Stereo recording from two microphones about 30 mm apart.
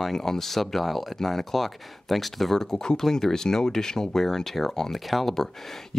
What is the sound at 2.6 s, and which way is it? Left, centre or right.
Speech, left.